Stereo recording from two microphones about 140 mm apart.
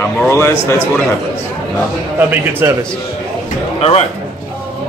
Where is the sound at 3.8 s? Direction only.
45° left (ahead or behind).